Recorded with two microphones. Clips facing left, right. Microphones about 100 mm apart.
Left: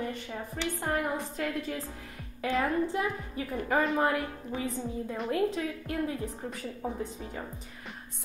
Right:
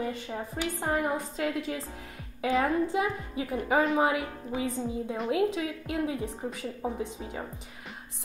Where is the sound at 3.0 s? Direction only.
15° right (ahead or behind).